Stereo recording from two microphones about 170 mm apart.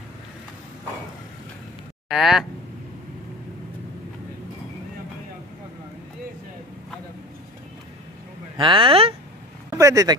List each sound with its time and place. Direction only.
2.0 s speech: centre (ahead or behind)
8.5 s speech: 30° right (ahead or behind)
9.8 s speech: 20° right (ahead or behind)